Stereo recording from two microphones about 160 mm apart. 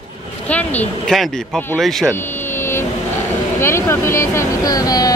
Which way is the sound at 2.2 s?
15° left (ahead or behind).